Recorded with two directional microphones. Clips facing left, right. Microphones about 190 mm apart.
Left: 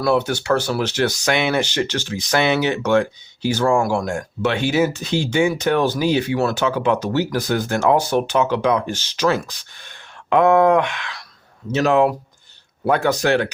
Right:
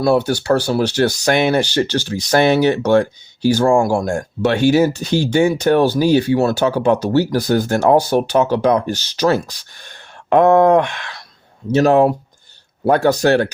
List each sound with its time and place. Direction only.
0.0 s speech: 30° right (ahead or behind)
4.0 s speech: 45° right (ahead or behind)